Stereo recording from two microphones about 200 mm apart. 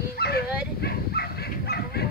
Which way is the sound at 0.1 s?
50° left (ahead or behind).